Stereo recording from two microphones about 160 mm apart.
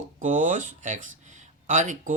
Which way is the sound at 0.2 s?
50° right (ahead or behind).